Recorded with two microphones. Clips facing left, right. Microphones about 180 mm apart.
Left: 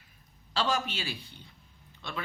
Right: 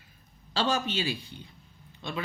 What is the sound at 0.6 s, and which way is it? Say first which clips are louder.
Speech: right 2 dB; 20° right (ahead or behind).